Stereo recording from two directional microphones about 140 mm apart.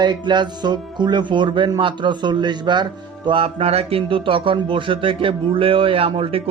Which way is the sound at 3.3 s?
40° right (ahead or behind).